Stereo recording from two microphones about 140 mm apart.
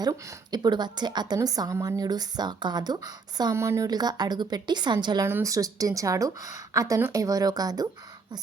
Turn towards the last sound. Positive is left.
turn(degrees=-25)  # may be behind; listen again after turning